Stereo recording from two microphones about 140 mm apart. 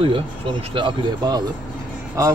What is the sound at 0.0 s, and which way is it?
Speech, 40° right (ahead or behind).